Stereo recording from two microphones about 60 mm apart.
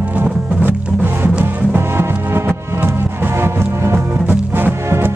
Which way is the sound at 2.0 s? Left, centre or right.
Right.